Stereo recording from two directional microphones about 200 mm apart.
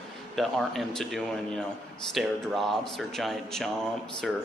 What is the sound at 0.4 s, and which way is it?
A man's voice, centre (ahead or behind).